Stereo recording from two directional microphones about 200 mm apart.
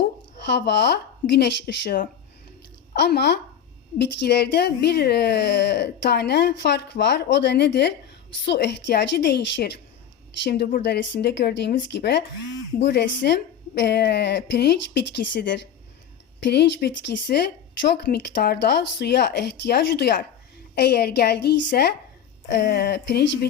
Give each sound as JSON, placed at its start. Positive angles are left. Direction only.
{"t": 0.5, "sound": "a woman's voice", "side_deg": 55}
{"t": 22.4, "sound": "a woman's voice", "side_deg": 60}